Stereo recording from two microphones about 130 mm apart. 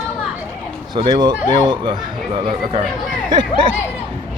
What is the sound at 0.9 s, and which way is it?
Speech, 35° right (ahead or behind).